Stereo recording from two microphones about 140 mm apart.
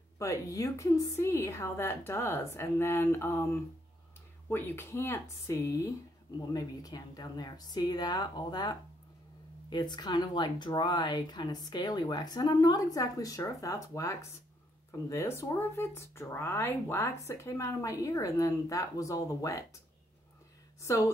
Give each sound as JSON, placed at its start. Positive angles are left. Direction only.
{"t": 0.2, "sound": "a woman's voice", "side_deg": 20}
{"t": 20.8, "sound": "speech", "side_deg": 20}